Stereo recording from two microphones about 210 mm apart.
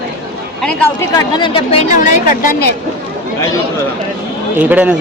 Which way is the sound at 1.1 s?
25° left (ahead or behind).